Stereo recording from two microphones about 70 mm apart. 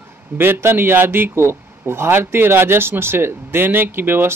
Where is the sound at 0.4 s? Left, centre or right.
Right.